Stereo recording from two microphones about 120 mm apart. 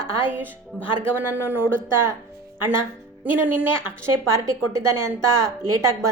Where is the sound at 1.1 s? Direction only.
15° right (ahead or behind).